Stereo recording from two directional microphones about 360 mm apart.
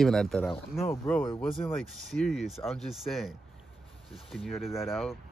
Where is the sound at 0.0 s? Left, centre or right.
Centre.